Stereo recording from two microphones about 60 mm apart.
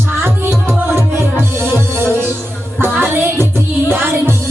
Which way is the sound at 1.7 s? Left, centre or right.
Right.